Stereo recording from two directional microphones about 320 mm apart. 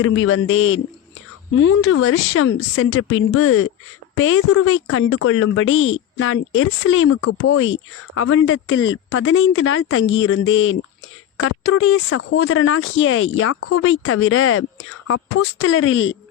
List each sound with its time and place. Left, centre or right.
0.0 s speech: left